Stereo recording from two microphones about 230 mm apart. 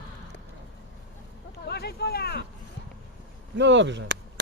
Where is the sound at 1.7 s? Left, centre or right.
Left.